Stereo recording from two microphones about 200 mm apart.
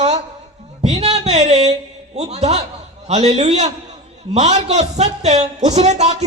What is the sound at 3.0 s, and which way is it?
A man's voice, 35° right (ahead or behind).